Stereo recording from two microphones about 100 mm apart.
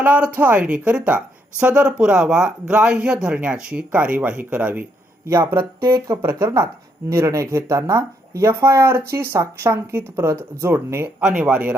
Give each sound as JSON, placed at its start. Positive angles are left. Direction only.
{"t": 0.0, "sound": "speech", "side_deg": -15}
{"t": 5.2, "sound": "speech", "side_deg": -25}
{"t": 5.8, "sound": "speech", "side_deg": -35}
{"t": 11.2, "sound": "speech", "side_deg": -10}